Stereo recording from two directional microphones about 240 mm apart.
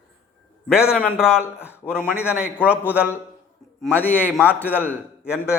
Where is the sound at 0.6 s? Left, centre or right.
Centre.